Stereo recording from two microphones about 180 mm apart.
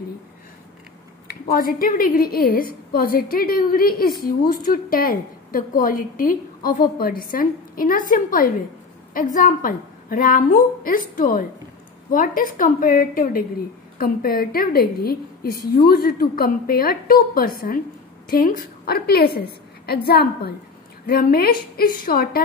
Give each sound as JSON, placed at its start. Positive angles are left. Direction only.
{"t": 1.2, "sound": "a woman's voice", "side_deg": 55}